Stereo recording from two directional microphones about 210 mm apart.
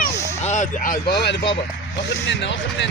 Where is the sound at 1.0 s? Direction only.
50° left (ahead or behind).